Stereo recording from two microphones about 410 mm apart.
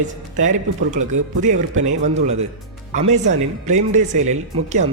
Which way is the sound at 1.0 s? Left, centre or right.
Centre.